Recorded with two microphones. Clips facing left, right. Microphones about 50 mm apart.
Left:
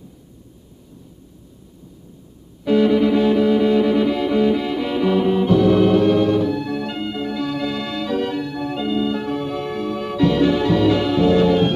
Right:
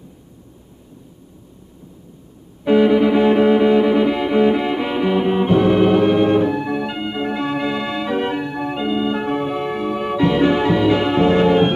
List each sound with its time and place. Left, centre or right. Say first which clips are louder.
2.6 s music: right 2 dB; right